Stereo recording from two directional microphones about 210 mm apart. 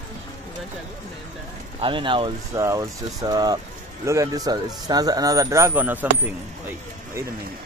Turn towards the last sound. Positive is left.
turn(degrees=-10)  # may be behind; listen again after turning